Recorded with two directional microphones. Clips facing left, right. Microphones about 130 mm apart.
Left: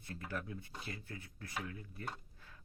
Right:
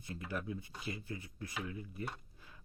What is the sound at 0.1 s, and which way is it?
Speech, 10° right (ahead or behind).